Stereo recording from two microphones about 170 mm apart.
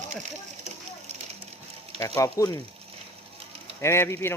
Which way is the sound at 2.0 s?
20° left (ahead or behind).